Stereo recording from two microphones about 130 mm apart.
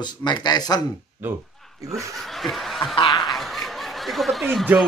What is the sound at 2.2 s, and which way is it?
Speech, centre (ahead or behind).